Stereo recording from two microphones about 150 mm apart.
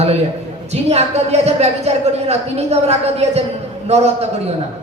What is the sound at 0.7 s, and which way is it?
Speech, 45° right (ahead or behind).